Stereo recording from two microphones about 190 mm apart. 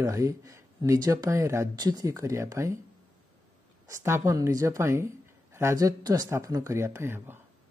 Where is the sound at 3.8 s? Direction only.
15° right (ahead or behind).